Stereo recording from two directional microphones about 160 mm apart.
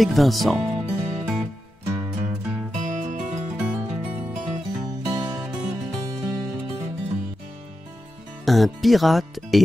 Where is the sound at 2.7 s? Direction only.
50° right (ahead or behind).